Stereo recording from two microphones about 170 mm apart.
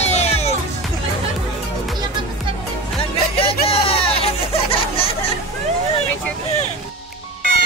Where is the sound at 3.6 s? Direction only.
35° left (ahead or behind).